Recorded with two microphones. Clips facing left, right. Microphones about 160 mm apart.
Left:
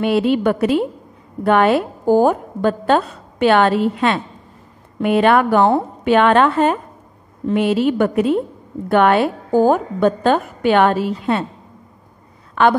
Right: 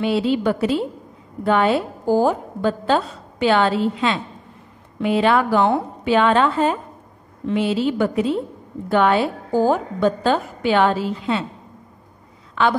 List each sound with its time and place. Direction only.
0.0 s a woman's voice: 60° left (ahead or behind)
12.6 s a woman's voice: 55° left (ahead or behind)